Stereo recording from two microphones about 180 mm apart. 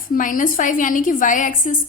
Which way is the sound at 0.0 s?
50° left (ahead or behind).